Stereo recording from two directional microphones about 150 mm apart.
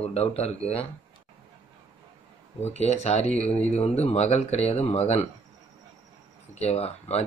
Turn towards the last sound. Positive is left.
turn(degrees=45)  # may be behind; listen again after turning